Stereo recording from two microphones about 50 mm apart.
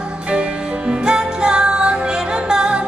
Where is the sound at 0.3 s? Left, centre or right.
Right.